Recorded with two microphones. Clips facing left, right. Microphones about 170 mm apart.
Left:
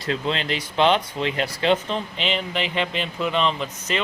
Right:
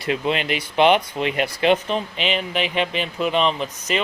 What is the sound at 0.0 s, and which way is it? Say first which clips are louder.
Speech: right 3 dB; 15° right (ahead or behind).